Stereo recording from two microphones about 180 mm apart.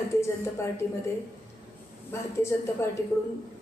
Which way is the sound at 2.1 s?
15° left (ahead or behind).